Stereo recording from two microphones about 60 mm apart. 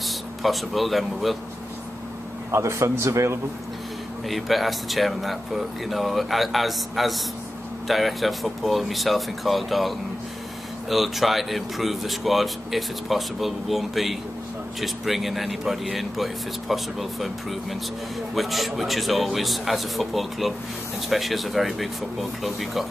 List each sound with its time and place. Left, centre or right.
0.0 s speech: centre
2.5 s a man's voice: right
4.3 s speech: centre